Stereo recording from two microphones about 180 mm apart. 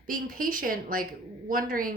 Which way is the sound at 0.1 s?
50° right (ahead or behind).